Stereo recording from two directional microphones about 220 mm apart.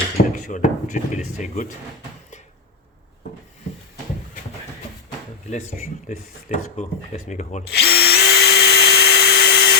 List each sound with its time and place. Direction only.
0.3 s speech: 35° left (ahead or behind)
5.5 s speech: 35° left (ahead or behind)
7.7 s drill: 45° left (ahead or behind)